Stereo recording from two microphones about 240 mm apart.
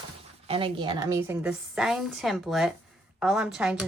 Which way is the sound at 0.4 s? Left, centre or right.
Right.